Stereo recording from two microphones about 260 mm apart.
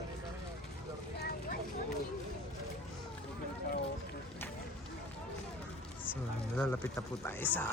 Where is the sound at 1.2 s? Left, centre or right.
Left.